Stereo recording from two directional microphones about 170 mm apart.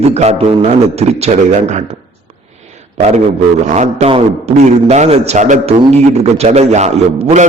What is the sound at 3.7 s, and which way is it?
A man's voice, 40° right (ahead or behind).